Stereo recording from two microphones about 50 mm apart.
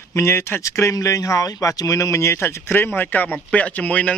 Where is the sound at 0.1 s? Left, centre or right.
Left.